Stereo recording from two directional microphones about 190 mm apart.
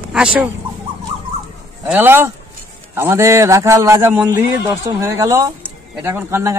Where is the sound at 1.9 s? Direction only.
10° right (ahead or behind).